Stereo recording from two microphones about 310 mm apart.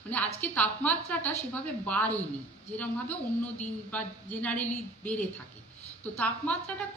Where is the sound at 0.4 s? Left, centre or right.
Centre.